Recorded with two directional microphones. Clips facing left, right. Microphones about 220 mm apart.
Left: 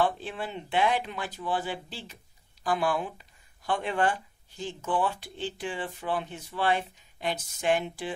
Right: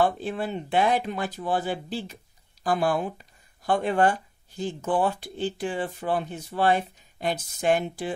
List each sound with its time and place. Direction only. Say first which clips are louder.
0.0 s speech: right 4 dB; 45° right (ahead or behind)